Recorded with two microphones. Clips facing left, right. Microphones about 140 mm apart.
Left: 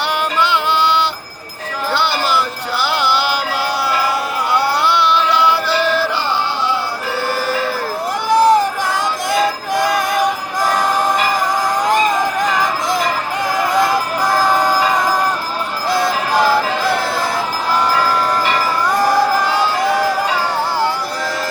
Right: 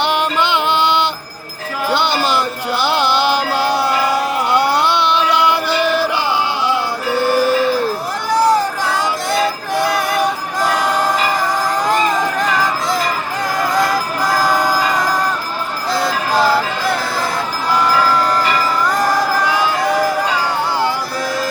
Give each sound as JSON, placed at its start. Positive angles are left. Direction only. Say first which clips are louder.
{"t": 0.0, "sound": "music", "louder": "right 1 dB", "side_deg": -20}
{"t": 7.3, "sound": "sheep", "louder": "right 6 dB", "side_deg": -15}
{"t": 8.3, "sound": "a sound", "louder": "left 2 dB", "side_deg": 20}
{"t": 11.9, "sound": "music", "louder": "left 1 dB", "side_deg": 20}
{"t": 13.6, "sound": "music", "louder": "left 1 dB", "side_deg": 20}
{"t": 15.9, "sound": "music", "louder": "left 1 dB", "side_deg": 20}